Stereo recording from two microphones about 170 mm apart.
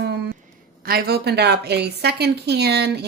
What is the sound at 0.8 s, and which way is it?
A woman's voice, 65° right (ahead or behind).